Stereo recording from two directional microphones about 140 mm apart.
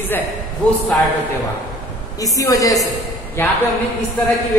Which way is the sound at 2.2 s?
25° left (ahead or behind).